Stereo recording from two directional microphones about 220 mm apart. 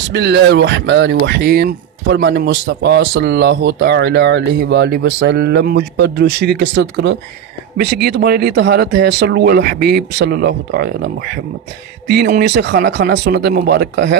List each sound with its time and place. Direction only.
0.1 s speech: 50° right (ahead or behind)